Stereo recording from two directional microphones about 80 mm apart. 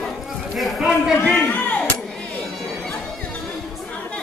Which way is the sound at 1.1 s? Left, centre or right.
Centre.